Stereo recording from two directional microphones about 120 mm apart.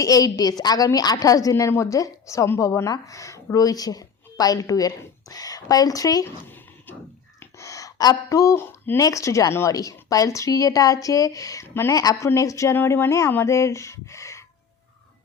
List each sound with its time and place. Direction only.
0.0 s a woman's voice: 30° left (ahead or behind)
7.3 s gasp: 25° left (ahead or behind)
9.0 s a woman's voice: 30° left (ahead or behind)